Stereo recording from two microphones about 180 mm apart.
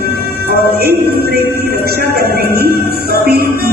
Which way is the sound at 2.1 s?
60° right (ahead or behind).